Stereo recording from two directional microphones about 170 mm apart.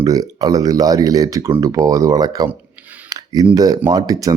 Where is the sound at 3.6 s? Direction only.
20° right (ahead or behind).